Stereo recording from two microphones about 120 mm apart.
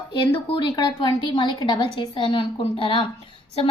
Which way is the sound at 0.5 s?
40° left (ahead or behind).